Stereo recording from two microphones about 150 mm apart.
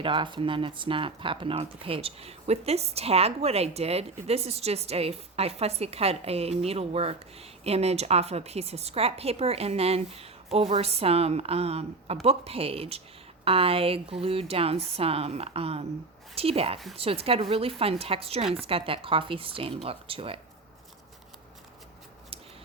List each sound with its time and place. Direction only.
0.0 s speech: 35° right (ahead or behind)